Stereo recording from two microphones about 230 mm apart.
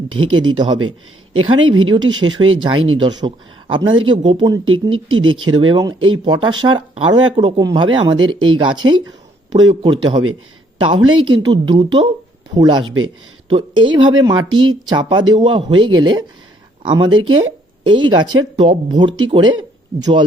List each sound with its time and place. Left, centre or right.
0.1 s speech: right
0.8 s speech: right
1.9 s speech: centre
2.4 s speech: right
3.0 s speech: centre
4.6 s speech: right
5.0 s speech: right
5.3 s speech: right
5.5 s speech: right
5.9 s speech: right
6.2 s a woman's voice: centre